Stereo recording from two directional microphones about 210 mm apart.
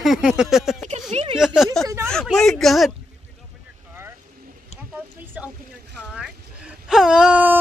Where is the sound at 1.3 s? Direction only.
Centre (ahead or behind).